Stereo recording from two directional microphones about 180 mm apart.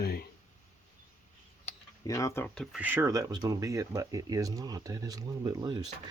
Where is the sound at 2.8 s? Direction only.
10° right (ahead or behind).